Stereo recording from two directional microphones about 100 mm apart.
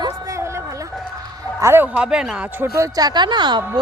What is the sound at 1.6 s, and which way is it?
Speech, 20° right (ahead or behind).